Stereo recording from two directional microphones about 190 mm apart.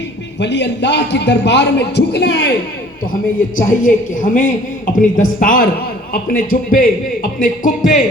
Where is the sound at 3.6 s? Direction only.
45° left (ahead or behind).